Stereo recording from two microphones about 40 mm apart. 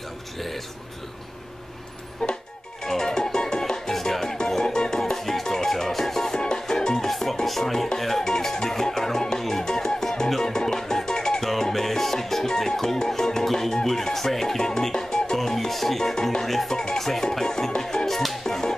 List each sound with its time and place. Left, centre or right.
2.2 s music: centre
7.1 s music: centre